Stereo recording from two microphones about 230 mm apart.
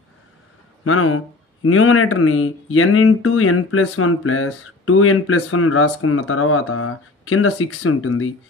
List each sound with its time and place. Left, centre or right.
0.8 s speech: left